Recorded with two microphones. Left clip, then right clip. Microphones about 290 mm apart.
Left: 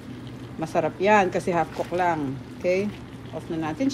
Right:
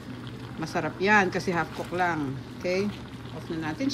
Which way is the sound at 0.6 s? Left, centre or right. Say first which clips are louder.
Left 5 dB; centre.